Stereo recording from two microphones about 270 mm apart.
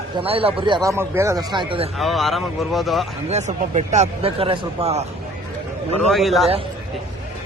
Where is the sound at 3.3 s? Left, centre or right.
Right.